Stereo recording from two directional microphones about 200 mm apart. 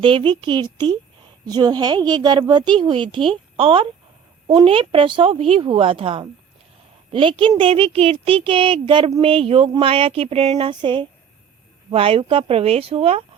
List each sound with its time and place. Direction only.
0.0 s speech: 25° right (ahead or behind)